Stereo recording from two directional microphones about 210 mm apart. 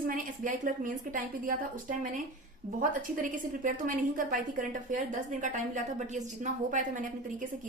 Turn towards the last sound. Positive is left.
turn(degrees=-35)  # may be behind; listen again after turning